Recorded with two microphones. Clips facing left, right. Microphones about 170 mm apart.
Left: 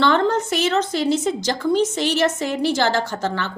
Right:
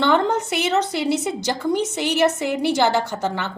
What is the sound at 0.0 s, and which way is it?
A woman's voice, 15° right (ahead or behind).